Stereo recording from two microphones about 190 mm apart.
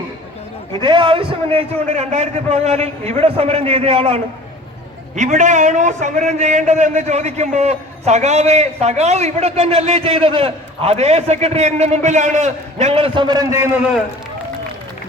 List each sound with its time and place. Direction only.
0.8 s a man's voice: 25° right (ahead or behind)